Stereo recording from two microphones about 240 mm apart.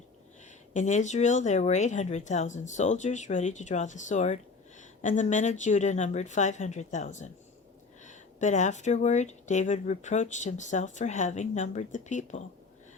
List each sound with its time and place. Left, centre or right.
0.7 s speech: left